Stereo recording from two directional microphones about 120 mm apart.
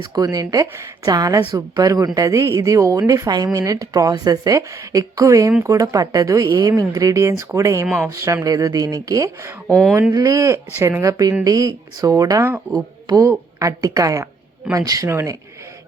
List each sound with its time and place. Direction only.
0.0 s a woman's voice: 35° right (ahead or behind)
9.6 s speech: 5° left (ahead or behind)
10.1 s a woman's voice: 30° right (ahead or behind)